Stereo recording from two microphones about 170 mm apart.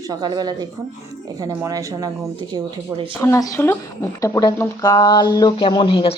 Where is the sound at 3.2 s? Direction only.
20° left (ahead or behind).